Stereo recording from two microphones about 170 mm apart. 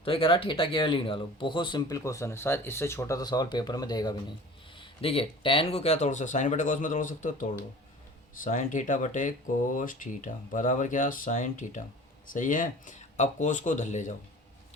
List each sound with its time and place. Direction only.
0.0 s speech: 30° left (ahead or behind)